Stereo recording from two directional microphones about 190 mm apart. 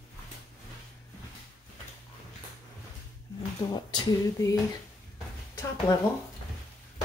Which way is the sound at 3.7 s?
20° left (ahead or behind).